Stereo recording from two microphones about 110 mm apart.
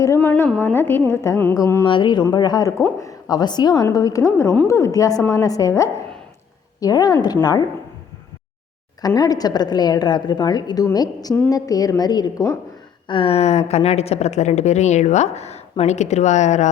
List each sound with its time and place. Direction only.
0.2 s a woman's voice: 15° left (ahead or behind)
1.8 s a woman's voice: 45° left (ahead or behind)
9.0 s a woman's voice: 35° left (ahead or behind)
13.1 s a woman's voice: 55° left (ahead or behind); by 16.6 s 90° left